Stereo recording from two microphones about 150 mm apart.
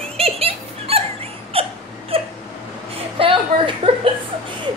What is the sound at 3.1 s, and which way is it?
Speech, 35° right (ahead or behind).